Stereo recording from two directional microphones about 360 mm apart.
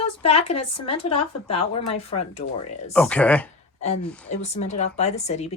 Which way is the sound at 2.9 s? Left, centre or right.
Centre.